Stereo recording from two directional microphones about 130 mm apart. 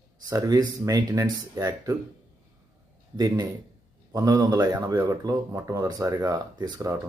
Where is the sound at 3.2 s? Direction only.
30° right (ahead or behind).